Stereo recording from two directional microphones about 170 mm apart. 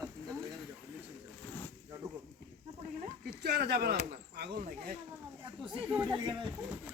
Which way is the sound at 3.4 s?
70° right (ahead or behind).